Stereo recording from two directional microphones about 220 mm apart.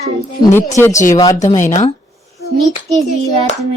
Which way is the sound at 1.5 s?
35° left (ahead or behind).